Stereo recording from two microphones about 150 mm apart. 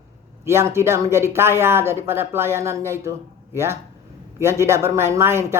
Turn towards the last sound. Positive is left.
turn(degrees=-15)  # may be behind; listen again after turning